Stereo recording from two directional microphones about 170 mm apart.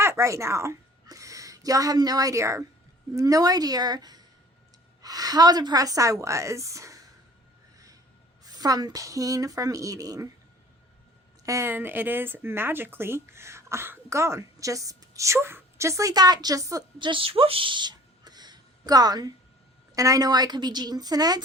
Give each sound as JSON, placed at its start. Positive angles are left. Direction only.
{"t": 0.0, "sound": "a woman's voice", "side_deg": -15}
{"t": 8.4, "sound": "a woman's voice", "side_deg": -20}
{"t": 11.4, "sound": "a woman's voice", "side_deg": -15}